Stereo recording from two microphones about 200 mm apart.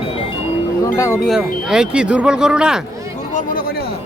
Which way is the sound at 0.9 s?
15° left (ahead or behind).